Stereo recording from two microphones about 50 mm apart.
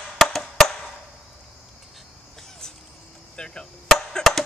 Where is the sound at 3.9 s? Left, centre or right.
Centre.